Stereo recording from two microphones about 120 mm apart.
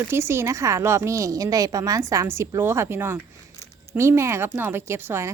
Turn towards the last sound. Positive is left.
turn(degrees=-20)  # may be behind; listen again after turning